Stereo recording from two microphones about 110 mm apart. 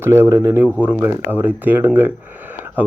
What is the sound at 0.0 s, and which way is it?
A man's voice, 20° right (ahead or behind).